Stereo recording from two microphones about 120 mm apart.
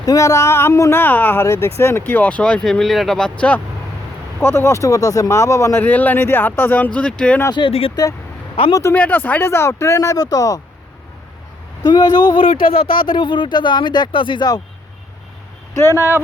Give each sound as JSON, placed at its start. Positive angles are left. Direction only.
{"t": 0.0, "sound": "speech", "side_deg": 30}
{"t": 7.7, "sound": "speech", "side_deg": 50}
{"t": 8.7, "sound": "speech", "side_deg": 20}
{"t": 11.8, "sound": "speech", "side_deg": 35}
{"t": 15.7, "sound": "speech", "side_deg": 20}